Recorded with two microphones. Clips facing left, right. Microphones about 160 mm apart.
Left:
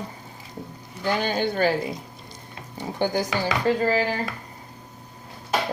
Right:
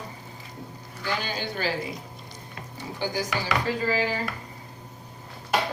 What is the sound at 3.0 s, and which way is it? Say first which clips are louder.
Speech: left 6 dB; 55° left (ahead or behind).